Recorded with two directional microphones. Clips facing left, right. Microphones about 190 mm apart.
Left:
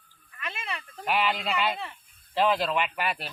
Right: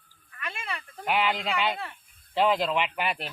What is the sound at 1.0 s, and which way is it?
Speech, 15° right (ahead or behind).